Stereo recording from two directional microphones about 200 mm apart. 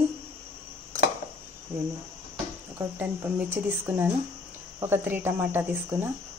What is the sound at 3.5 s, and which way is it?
Speech, 10° right (ahead or behind).